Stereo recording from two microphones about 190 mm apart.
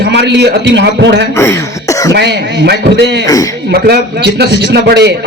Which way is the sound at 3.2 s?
20° left (ahead or behind).